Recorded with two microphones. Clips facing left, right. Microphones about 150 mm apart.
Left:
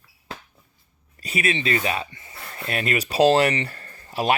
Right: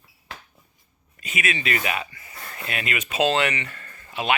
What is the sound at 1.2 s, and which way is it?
Speech, 35° left (ahead or behind).